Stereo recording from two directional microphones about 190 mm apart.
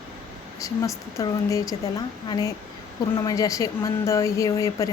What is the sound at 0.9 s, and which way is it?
Speech, 15° left (ahead or behind).